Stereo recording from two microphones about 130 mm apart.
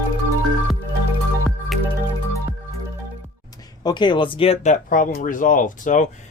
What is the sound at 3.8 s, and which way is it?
Speech, 35° left (ahead or behind).